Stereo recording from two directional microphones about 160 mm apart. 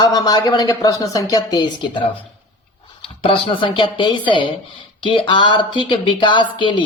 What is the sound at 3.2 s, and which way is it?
A woman's voice, 35° left (ahead or behind).